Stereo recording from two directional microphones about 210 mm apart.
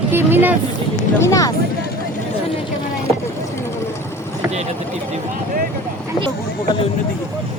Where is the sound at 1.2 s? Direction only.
15° left (ahead or behind).